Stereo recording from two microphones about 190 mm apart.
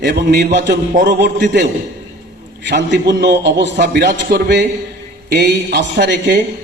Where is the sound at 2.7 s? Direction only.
60° right (ahead or behind).